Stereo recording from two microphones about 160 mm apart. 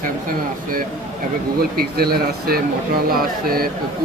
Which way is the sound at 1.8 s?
75° right (ahead or behind).